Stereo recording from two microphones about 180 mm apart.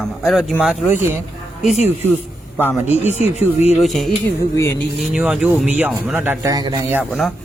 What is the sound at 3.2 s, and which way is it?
Speech, 35° left (ahead or behind).